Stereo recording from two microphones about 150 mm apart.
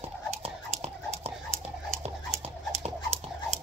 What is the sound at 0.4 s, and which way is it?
Whispering, 45° right (ahead or behind).